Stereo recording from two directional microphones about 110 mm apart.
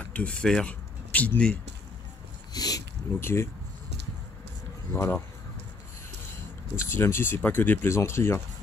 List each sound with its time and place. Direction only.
0.0 s speech: 10° left (ahead or behind)
2.5 s a sound: 35° left (ahead or behind)
3.2 s speech: 20° left (ahead or behind)
4.9 s speech: 20° left (ahead or behind)
6.8 s speech: 20° left (ahead or behind)